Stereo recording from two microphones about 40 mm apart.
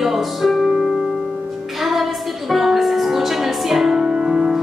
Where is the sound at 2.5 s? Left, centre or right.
Centre.